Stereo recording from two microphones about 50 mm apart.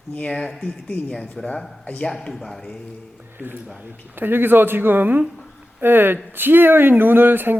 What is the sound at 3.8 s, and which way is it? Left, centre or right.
Speech, right.